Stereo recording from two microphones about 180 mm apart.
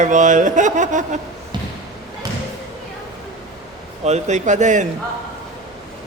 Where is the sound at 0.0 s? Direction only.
45° right (ahead or behind).